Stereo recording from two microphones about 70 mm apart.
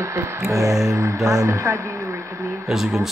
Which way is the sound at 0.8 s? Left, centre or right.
Right.